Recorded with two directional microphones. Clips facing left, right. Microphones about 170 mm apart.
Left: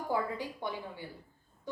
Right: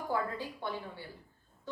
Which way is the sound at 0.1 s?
15° left (ahead or behind).